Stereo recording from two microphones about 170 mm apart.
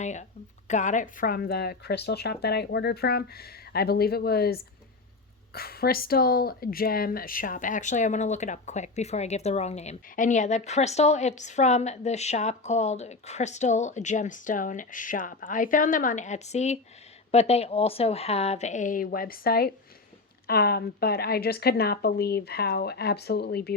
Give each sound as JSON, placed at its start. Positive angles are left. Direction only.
{"t": 0.0, "sound": "speech", "side_deg": 45}